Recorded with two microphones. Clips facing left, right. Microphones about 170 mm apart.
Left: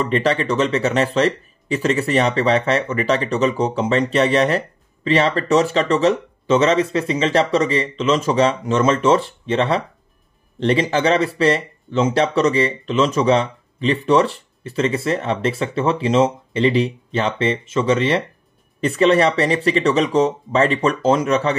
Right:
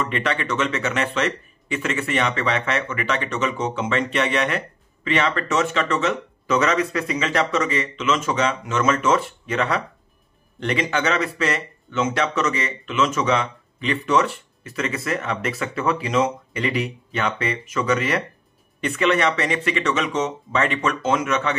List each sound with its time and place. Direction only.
0.0 s speech: 35° left (ahead or behind)